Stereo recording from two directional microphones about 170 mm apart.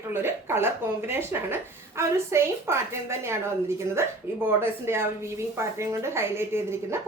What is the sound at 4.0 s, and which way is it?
A woman's voice, 15° right (ahead or behind).